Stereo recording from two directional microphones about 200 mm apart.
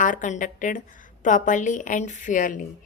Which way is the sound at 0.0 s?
40° left (ahead or behind).